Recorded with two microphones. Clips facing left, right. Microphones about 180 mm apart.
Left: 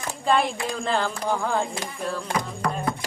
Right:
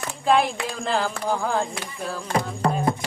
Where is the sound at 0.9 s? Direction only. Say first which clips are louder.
Right 1 dB; 5° right (ahead or behind).